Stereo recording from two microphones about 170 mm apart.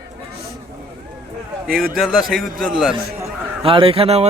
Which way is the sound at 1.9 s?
Centre (ahead or behind).